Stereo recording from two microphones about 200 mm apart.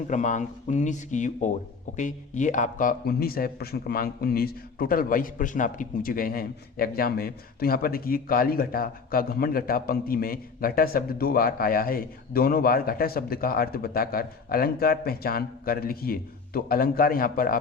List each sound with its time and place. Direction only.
0.1 s a man's voice: 35° left (ahead or behind)